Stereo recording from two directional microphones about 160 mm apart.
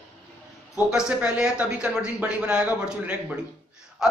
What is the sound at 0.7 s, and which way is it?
A man's voice, 5° right (ahead or behind).